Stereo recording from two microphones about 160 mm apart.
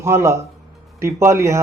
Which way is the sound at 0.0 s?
15° right (ahead or behind).